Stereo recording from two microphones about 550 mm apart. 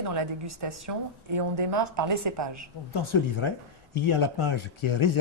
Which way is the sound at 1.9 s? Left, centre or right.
Right.